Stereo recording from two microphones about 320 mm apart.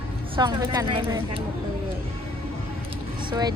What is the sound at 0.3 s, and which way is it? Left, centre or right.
Speech, centre.